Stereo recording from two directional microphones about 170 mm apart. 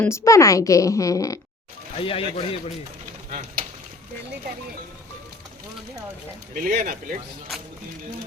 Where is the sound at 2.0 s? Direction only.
30° left (ahead or behind).